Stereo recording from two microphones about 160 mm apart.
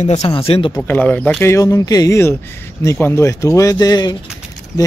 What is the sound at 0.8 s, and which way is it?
Speech, 10° left (ahead or behind).